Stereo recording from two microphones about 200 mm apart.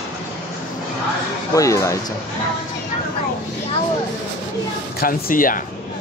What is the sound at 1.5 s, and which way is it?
Speech, 15° left (ahead or behind).